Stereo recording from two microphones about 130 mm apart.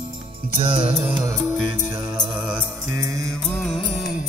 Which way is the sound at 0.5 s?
45° right (ahead or behind).